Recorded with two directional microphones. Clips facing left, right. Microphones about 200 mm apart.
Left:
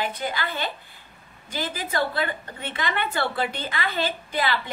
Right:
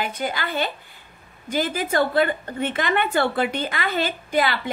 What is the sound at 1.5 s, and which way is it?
A woman's voice, 50° right (ahead or behind).